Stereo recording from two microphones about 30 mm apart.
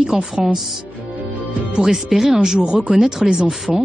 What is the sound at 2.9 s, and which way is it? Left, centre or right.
Speech, right.